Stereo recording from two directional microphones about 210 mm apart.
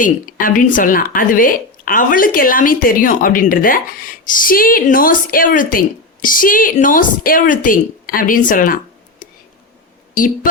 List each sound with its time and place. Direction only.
0.0 s speech: 40° left (ahead or behind)
10.2 s speech: 40° left (ahead or behind)